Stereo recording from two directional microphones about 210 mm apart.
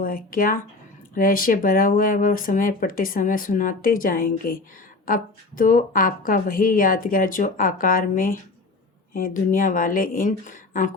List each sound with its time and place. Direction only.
0.0 s speech: 40° left (ahead or behind)